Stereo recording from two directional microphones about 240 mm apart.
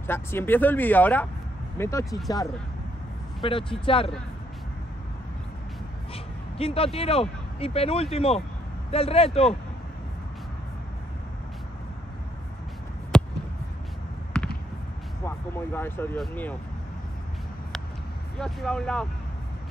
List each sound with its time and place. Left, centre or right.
0.0 s speech: centre
2.0 s speech: centre
3.4 s speech: left
6.6 s speech: left
13.1 s a sound: centre
14.3 s fireworks: centre
15.2 s speech: centre
18.4 s speech: centre